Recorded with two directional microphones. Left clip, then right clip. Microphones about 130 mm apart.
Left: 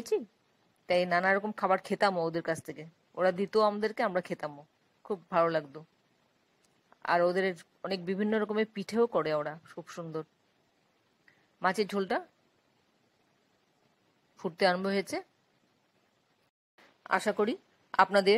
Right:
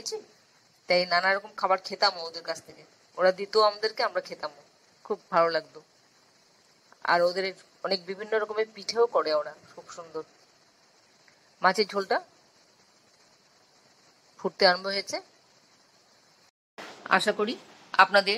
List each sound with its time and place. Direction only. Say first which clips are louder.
0.8 s a man's voice: right 3 dB; 20° left (ahead or behind)
6.9 s a man's voice: right 3 dB; 25° left (ahead or behind)
11.6 s a man's voice: right 5 dB; 25° left (ahead or behind)
14.3 s a man's voice: right 5 dB; 20° left (ahead or behind)
17.0 s speech: right 4 dB; 60° left (ahead or behind)